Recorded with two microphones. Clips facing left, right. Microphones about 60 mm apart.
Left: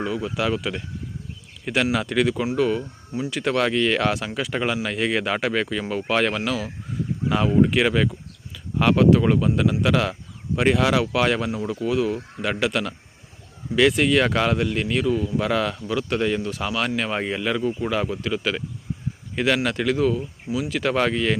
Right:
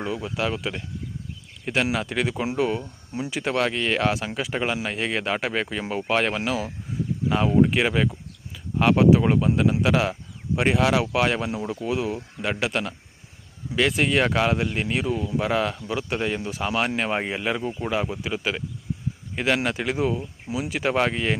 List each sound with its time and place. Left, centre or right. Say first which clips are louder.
0.0 s speech: left 2 dB; centre
3.3 s speech: left 3 dB; centre
16.6 s speech: right 2 dB; right